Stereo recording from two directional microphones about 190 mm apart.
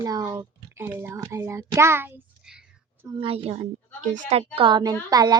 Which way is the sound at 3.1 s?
30° right (ahead or behind).